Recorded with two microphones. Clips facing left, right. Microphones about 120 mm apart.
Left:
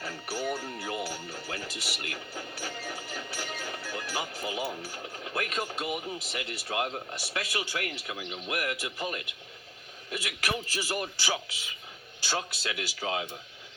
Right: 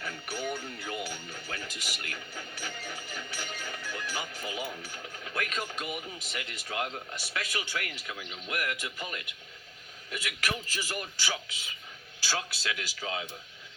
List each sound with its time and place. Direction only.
0.0 s music: 35° left (ahead or behind)
4.8 s speech: 35° left (ahead or behind)
12.7 s speech: 35° left (ahead or behind)